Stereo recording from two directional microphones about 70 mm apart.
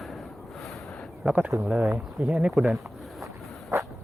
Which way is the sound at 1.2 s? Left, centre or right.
Centre.